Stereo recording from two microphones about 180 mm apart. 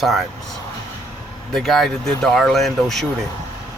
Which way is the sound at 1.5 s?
Centre (ahead or behind).